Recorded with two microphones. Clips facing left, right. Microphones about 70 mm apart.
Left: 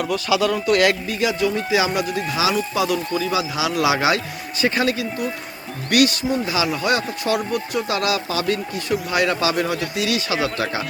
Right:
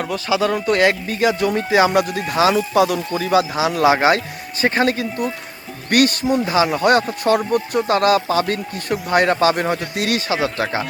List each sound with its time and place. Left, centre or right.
0.0 s speech: right
1.1 s speech: right
10.2 s speech: right